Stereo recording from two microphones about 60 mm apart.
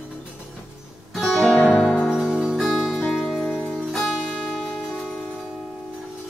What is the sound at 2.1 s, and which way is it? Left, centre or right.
Music, centre.